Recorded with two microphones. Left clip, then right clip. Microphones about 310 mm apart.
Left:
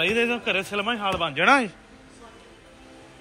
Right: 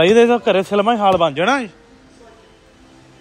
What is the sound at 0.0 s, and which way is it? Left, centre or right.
A man's voice, centre.